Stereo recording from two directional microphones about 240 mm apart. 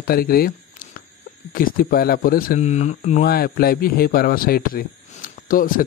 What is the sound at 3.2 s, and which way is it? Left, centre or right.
Speech, left.